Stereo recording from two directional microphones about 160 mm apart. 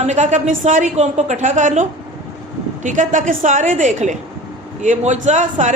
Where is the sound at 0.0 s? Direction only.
45° right (ahead or behind).